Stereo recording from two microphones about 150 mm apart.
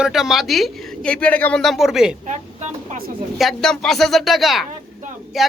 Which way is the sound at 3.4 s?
Centre (ahead or behind).